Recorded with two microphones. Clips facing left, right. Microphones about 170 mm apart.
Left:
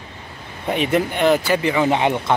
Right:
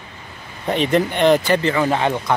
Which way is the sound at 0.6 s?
10° left (ahead or behind).